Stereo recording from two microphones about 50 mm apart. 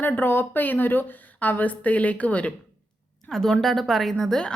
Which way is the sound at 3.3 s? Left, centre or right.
Centre.